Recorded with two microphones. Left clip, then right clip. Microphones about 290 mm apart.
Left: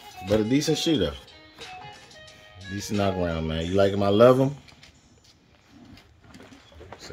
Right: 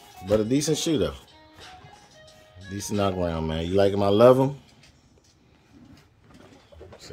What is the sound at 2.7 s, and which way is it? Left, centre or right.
A man's voice, centre.